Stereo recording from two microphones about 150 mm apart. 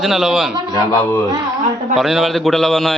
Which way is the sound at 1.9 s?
Centre (ahead or behind).